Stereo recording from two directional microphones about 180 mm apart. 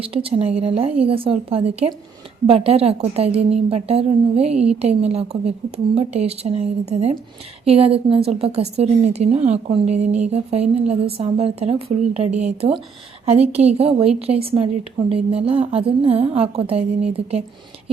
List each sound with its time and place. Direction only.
0.1 s a woman's voice: 30° right (ahead or behind)